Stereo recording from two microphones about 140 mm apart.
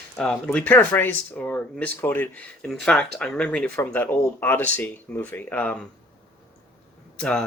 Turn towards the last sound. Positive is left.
turn(degrees=5)  # may be behind; listen again after turning